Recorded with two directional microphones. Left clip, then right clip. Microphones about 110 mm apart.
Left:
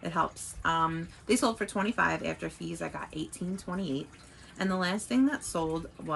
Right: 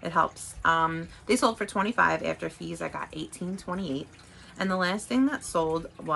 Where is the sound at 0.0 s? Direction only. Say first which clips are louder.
Right 5 dB; 35° right (ahead or behind).